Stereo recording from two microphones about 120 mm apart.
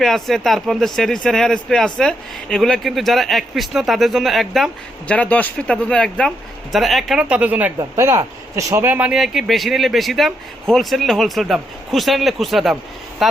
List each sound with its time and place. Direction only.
0.0 s speech: centre (ahead or behind)
5.0 s speech: 10° left (ahead or behind); by 7.7 s 10° right (ahead or behind)
7.8 s speech: 25° right (ahead or behind); by 13.4 s centre (ahead or behind)